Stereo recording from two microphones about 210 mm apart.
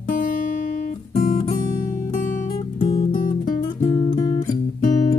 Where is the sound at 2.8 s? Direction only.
30° left (ahead or behind).